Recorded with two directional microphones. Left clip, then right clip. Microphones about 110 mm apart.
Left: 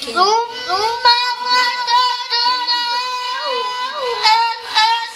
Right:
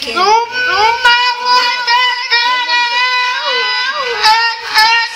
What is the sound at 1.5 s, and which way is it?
Child singing, 25° right (ahead or behind).